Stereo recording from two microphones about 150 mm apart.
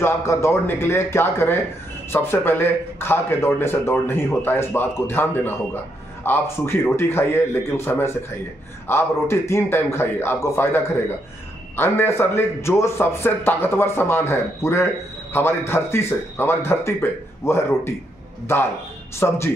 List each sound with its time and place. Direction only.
0.0 s speech: 20° left (ahead or behind)